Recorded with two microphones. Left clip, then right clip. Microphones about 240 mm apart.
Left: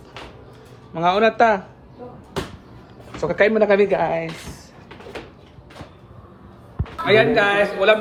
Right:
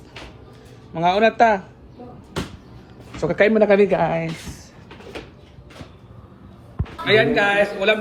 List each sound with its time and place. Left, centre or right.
0.9 s speech: centre
3.2 s speech: centre
7.0 s speech: centre